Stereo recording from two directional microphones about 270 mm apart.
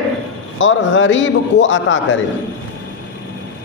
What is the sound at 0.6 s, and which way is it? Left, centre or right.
A man's voice, left.